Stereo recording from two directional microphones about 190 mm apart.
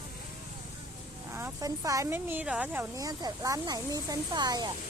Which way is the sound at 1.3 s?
15° right (ahead or behind).